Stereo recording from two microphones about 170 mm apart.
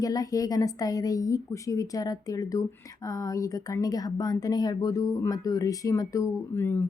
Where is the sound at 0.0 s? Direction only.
20° left (ahead or behind).